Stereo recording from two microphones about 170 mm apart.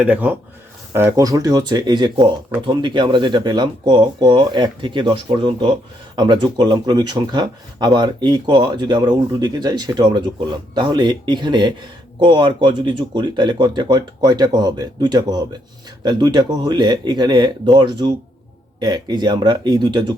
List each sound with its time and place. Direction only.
0.0 s speech: 10° right (ahead or behind); by 20.1 s 25° right (ahead or behind)